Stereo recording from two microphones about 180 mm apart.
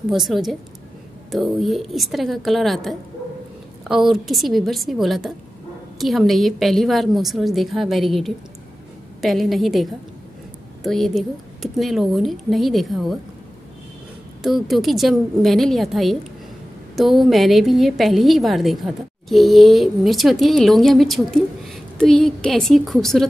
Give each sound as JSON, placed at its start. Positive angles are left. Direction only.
{"t": 0.1, "sound": "a woman's voice", "side_deg": 0}
{"t": 14.4, "sound": "a woman's voice", "side_deg": 0}